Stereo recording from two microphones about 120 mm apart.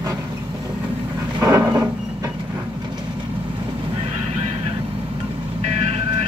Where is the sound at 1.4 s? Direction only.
30° right (ahead or behind).